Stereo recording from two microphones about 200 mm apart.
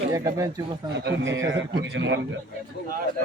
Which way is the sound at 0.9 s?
60° right (ahead or behind).